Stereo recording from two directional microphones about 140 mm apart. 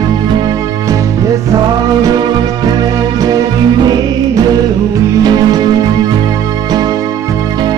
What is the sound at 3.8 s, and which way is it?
Music, 30° right (ahead or behind).